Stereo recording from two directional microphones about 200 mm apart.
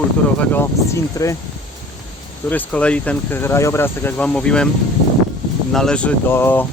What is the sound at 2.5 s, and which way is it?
Speech, 5° left (ahead or behind).